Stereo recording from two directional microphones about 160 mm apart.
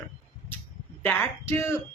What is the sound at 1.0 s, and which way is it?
Speech, 15° left (ahead or behind).